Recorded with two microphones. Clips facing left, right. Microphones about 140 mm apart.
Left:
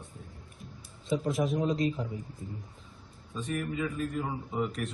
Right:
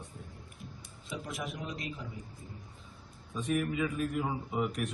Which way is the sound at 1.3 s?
30° left (ahead or behind).